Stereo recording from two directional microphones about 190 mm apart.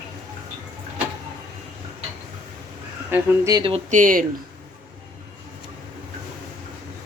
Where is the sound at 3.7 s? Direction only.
40° right (ahead or behind).